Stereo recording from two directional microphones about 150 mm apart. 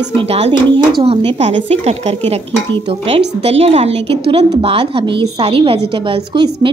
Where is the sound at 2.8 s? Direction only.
35° right (ahead or behind).